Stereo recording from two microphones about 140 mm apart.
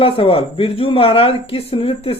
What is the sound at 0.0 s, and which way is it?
Speech, 40° left (ahead or behind).